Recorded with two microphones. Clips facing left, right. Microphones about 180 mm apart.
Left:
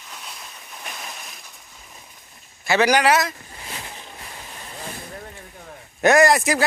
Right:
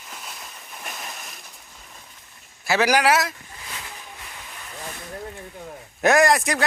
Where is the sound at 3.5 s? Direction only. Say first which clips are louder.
Left 2 dB; 30° left (ahead or behind).